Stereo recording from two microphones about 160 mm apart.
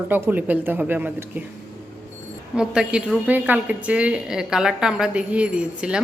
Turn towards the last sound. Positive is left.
turn(degrees=-5)  # may be behind; listen again after turning